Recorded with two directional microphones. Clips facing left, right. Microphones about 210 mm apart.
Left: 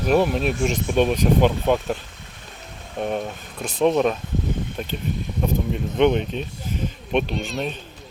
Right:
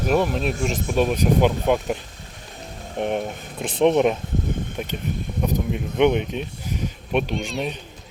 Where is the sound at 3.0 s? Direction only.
15° right (ahead or behind).